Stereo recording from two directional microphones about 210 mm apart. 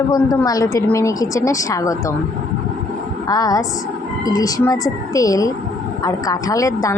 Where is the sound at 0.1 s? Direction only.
15° left (ahead or behind).